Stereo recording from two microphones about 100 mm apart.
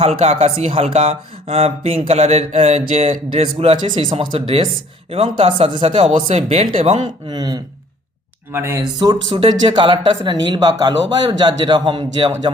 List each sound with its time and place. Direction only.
0.0 s speech: 85° right
7.3 s speech: 45° right (ahead or behind)
8.5 s speech: 30° right (ahead or behind)
9.3 s speech: 60° right (ahead or behind)